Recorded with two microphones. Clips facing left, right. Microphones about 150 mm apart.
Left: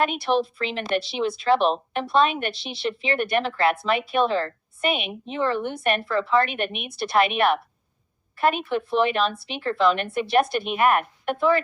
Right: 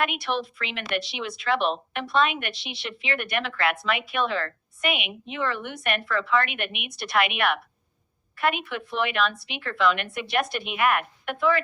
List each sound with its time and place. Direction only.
0.0 s speech: 35° left (ahead or behind)